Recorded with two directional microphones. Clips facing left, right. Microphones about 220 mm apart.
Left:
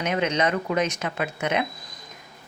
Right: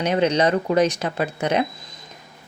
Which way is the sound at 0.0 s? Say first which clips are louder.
Right 5 dB; 35° right (ahead or behind).